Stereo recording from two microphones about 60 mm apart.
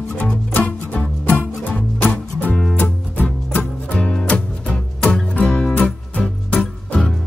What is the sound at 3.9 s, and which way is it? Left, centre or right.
Music, centre.